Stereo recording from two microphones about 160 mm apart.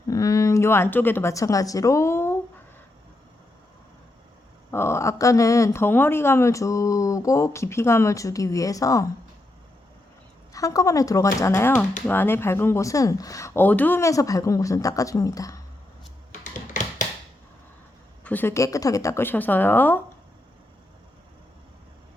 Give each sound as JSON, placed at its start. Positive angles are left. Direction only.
{"t": 0.1, "sound": "speech", "side_deg": 20}
{"t": 4.7, "sound": "speech", "side_deg": 15}
{"t": 10.5, "sound": "speech", "side_deg": 20}
{"t": 16.3, "sound": "a sound", "side_deg": 50}
{"t": 18.2, "sound": "a woman's voice", "side_deg": 10}